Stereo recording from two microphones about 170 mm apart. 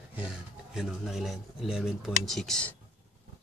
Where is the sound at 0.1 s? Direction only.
5° right (ahead or behind).